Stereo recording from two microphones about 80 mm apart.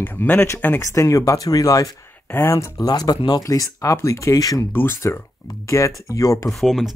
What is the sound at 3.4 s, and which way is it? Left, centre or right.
Speech, left.